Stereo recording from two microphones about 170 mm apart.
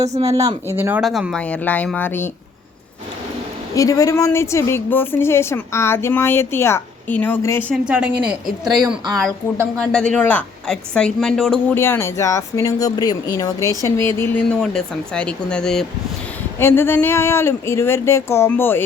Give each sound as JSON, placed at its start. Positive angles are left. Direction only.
{"t": 0.0, "sound": "speech", "side_deg": -40}
{"t": 0.3, "sound": "speech", "side_deg": -20}
{"t": 1.0, "sound": "speech", "side_deg": 0}
{"t": 3.8, "sound": "speech", "side_deg": 20}
{"t": 7.9, "sound": "a woman's voice", "side_deg": -5}
{"t": 11.7, "sound": "speech", "side_deg": 15}